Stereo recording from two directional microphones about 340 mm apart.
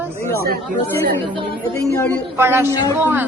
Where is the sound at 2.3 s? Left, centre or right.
Centre.